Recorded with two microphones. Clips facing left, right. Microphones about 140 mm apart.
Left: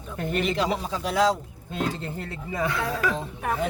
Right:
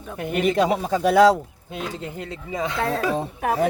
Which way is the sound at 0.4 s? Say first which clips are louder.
Right 9 dB; 50° right (ahead or behind).